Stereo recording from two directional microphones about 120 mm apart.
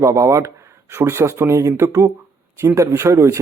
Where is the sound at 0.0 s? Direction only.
25° right (ahead or behind).